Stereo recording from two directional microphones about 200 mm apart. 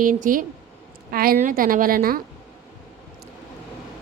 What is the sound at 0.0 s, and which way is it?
Speech, 40° right (ahead or behind).